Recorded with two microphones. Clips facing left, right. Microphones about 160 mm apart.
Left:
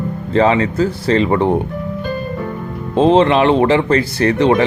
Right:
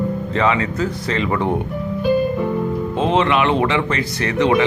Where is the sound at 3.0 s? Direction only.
30° left (ahead or behind).